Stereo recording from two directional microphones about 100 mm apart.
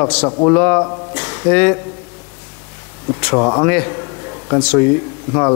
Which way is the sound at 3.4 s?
25° left (ahead or behind).